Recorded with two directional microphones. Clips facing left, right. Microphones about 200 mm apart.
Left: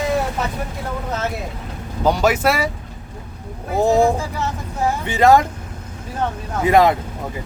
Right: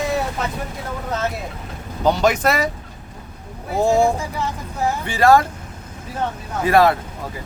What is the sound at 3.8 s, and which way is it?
Speech, 15° left (ahead or behind).